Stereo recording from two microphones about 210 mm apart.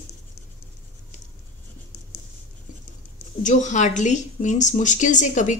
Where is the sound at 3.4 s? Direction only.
35° left (ahead or behind).